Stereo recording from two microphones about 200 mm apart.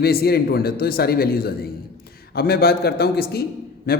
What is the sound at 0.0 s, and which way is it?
A man's voice, 50° left (ahead or behind).